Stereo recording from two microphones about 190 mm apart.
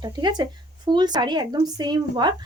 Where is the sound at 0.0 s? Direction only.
20° right (ahead or behind).